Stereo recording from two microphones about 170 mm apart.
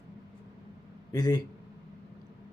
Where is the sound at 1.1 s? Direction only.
25° left (ahead or behind).